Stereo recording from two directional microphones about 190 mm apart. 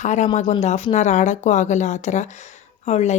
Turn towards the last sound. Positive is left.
turn(degrees=35)  # may be behind; listen again after turning